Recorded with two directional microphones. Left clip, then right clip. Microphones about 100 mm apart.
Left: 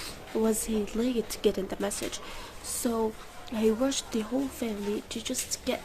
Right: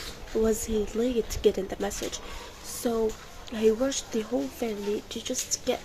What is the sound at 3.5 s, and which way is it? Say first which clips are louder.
A woman's voice: right 2 dB; 30° left (ahead or behind).